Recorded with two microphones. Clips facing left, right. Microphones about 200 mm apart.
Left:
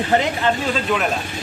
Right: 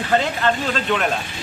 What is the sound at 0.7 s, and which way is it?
Speech, 5° left (ahead or behind).